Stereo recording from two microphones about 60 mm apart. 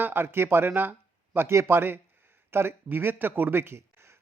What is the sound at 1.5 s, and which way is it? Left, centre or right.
A man's voice, right.